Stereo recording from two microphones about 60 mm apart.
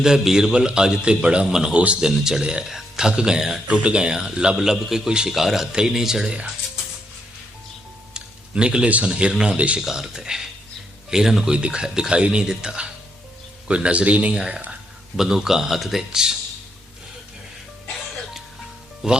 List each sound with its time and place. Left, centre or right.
0.0 s a man's voice: centre
1.7 s speech: centre
2.0 s a man's voice: centre
3.7 s a man's voice: centre
8.1 s speech: centre
9.8 s a man's voice: centre
19.0 s a man's voice: centre